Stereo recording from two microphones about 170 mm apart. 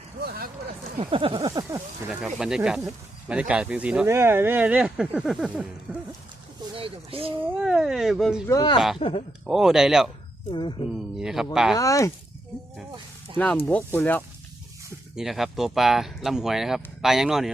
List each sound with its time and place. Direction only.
0.3 s speech: 65° right (ahead or behind)
0.9 s speech: 30° right (ahead or behind)
2.0 s speech: 5° right (ahead or behind)
6.7 s speech: 35° right (ahead or behind)
7.6 s speech: 5° right (ahead or behind)
8.4 s speech: 25° left (ahead or behind)
9.5 s speech: 5° right (ahead or behind)
10.5 s speech: 25° left (ahead or behind)
11.2 s speech: 5° right (ahead or behind)
11.8 s speech: 20° left (ahead or behind)
13.7 s speech: 10° left (ahead or behind)
15.1 s speech: centre (ahead or behind)